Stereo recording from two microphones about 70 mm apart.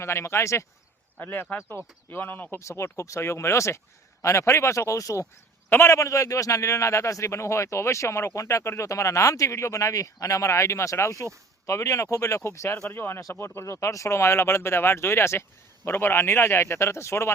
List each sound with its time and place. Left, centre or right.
0.0 s speech: left
1.2 s speech: left
2.6 s speech: left
5.6 s a man's voice: left
5.9 s speech: left